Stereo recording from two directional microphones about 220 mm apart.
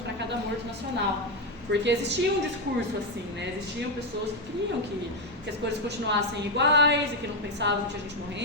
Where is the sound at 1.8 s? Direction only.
50° right (ahead or behind).